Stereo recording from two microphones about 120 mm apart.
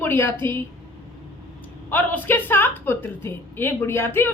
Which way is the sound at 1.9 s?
15° left (ahead or behind).